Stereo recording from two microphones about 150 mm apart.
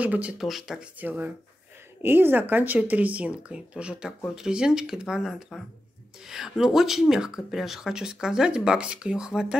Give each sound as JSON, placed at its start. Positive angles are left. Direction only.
{"t": 0.0, "sound": "speech", "side_deg": -10}